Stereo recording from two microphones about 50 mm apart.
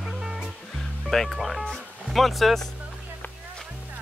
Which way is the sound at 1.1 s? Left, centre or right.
Centre.